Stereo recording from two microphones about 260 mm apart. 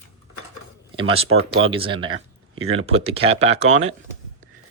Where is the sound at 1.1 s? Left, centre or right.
Right.